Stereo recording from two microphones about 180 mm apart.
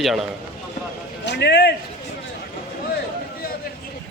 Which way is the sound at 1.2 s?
70° left (ahead or behind).